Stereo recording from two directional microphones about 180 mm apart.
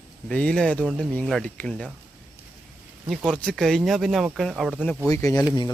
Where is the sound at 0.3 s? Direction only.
5° left (ahead or behind).